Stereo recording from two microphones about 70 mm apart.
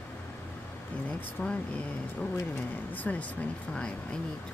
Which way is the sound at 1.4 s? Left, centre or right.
Left.